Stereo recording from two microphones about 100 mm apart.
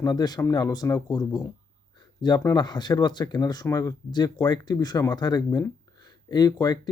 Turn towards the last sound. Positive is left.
turn(degrees=45)  # may be behind; listen again after turning